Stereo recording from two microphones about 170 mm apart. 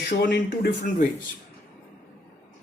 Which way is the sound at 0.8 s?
50° left (ahead or behind).